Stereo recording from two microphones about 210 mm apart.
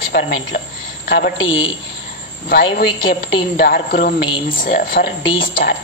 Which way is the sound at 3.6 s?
50° left (ahead or behind).